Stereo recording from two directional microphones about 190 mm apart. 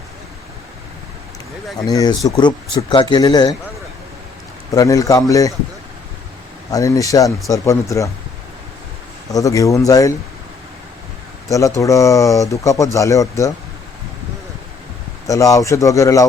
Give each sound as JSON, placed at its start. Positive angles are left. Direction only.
{"t": 1.9, "sound": "speech", "side_deg": 20}
{"t": 4.7, "sound": "speech", "side_deg": 20}
{"t": 6.7, "sound": "speech", "side_deg": 20}
{"t": 9.3, "sound": "speech", "side_deg": 15}
{"t": 11.4, "sound": "speech", "side_deg": 15}
{"t": 15.3, "sound": "speech", "side_deg": 15}